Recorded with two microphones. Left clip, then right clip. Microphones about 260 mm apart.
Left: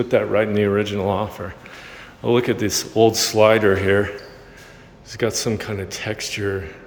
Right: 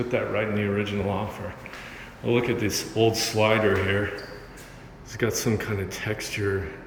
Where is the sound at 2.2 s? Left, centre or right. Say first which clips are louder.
Left 5 dB; centre.